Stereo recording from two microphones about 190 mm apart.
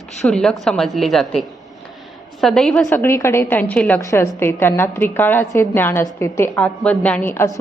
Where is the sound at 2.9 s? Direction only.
15° left (ahead or behind).